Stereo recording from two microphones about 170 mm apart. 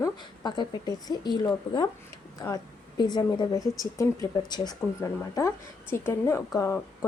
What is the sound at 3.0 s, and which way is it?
Speech, 25° left (ahead or behind).